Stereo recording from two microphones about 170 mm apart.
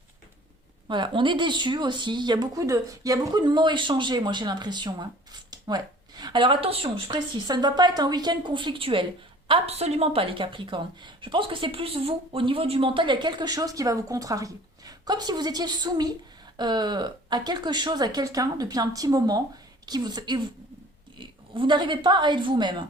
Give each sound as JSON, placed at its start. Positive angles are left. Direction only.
{"t": 0.9, "sound": "a woman's voice", "side_deg": -30}